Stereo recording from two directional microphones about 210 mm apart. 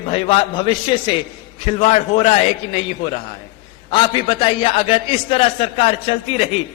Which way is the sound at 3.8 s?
25° left (ahead or behind).